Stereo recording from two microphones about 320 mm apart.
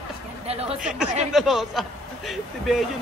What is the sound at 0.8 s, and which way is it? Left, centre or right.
A man's voice, centre.